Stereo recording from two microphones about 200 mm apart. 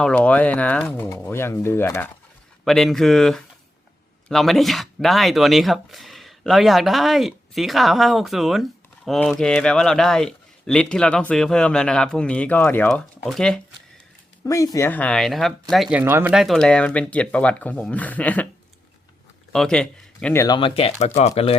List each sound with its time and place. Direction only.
0.0 s speech: 5° left (ahead or behind)
14.4 s speech: 15° left (ahead or behind)
19.5 s speech: 5° left (ahead or behind)
20.6 s speech: 25° left (ahead or behind)